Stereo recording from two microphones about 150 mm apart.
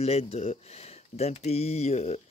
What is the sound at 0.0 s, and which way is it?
Speech, 45° left (ahead or behind).